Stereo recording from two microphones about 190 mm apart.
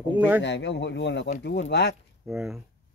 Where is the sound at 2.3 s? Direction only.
5° right (ahead or behind).